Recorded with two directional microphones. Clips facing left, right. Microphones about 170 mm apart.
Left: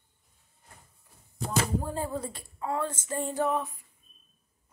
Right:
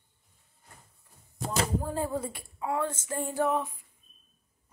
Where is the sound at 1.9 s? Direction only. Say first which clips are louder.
Right 2 dB; 5° right (ahead or behind).